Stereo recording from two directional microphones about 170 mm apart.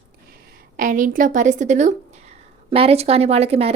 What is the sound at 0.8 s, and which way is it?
A woman's voice, 50° right (ahead or behind).